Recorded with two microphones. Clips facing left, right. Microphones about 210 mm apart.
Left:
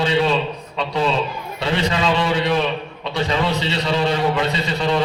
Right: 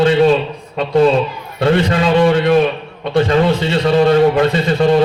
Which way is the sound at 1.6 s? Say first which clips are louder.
Right 7 dB; 50° right (ahead or behind).